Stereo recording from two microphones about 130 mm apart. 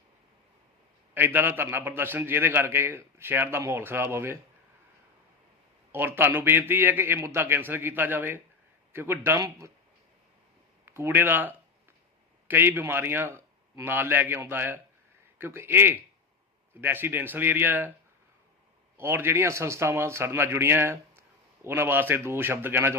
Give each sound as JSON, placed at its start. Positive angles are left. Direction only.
{"t": 1.1, "sound": "a man's voice", "side_deg": -15}
{"t": 5.9, "sound": "a man's voice", "side_deg": -15}
{"t": 10.8, "sound": "a man's voice", "side_deg": -20}
{"t": 18.9, "sound": "speech", "side_deg": -20}